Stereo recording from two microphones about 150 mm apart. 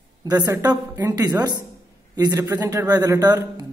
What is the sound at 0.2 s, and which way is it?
Speech, 25° right (ahead or behind).